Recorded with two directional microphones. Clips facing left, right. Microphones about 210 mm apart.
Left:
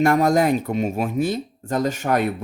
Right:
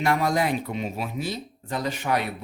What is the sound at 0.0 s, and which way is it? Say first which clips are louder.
Speech: left 6 dB; 45° left (ahead or behind).